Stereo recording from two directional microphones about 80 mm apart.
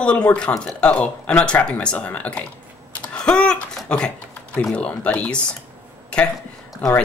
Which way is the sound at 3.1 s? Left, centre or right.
Centre.